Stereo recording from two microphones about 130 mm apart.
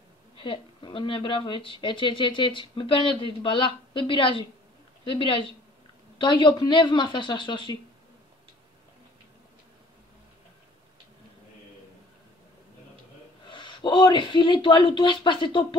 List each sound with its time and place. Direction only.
0.4 s speech: 40° left (ahead or behind)
13.5 s speech: 40° left (ahead or behind)